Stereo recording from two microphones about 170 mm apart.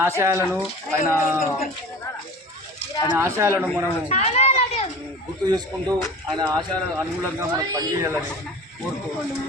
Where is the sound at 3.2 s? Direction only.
15° right (ahead or behind).